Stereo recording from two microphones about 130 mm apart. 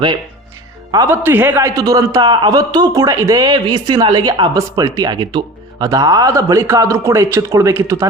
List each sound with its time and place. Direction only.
1.0 s speech: 15° right (ahead or behind)
1.7 s a man's voice: 30° right (ahead or behind)